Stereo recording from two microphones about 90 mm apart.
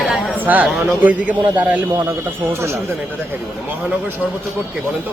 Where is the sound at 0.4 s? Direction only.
20° right (ahead or behind).